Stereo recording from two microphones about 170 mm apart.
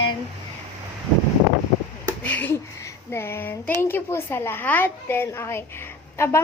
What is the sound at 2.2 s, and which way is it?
A woman's voice, 10° left (ahead or behind).